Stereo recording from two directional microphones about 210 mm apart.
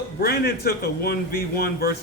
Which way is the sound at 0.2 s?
50° left (ahead or behind).